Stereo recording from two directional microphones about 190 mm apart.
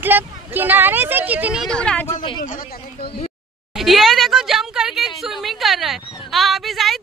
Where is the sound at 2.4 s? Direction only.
50° left (ahead or behind).